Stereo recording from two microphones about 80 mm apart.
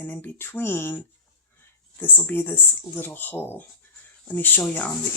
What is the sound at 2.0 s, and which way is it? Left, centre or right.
Speech, left.